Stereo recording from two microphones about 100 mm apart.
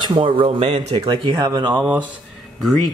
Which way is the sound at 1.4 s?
45° right (ahead or behind).